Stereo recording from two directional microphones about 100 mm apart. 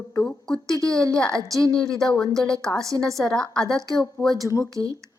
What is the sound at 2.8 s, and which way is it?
Speech, 30° right (ahead or behind).